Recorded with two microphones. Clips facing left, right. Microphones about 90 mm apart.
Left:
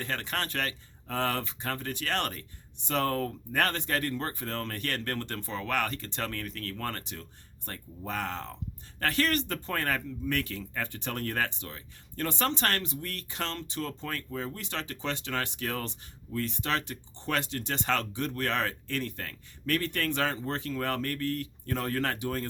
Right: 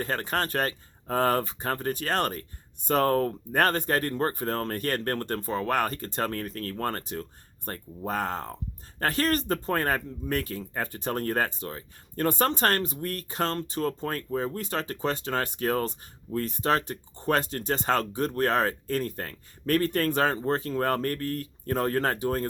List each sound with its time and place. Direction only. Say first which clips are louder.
0.0 s speech: right 5 dB; 40° right (ahead or behind)